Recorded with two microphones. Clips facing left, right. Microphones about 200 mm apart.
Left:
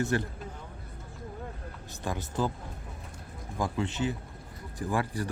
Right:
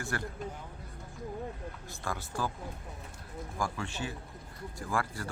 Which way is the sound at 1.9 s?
20° left (ahead or behind).